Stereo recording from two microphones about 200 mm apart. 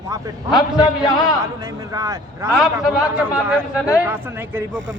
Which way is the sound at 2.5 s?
Centre (ahead or behind).